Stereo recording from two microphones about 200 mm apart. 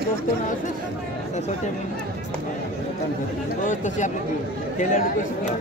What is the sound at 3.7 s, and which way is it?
Speech, 40° left (ahead or behind).